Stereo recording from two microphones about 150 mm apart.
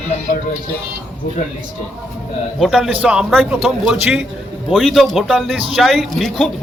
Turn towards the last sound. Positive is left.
turn(degrees=0)  # may be behind; listen again after turning